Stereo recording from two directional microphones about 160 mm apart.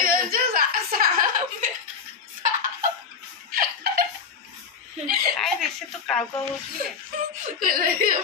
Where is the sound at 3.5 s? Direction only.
80° right.